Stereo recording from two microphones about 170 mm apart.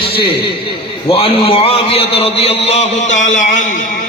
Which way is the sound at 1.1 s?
35° left (ahead or behind).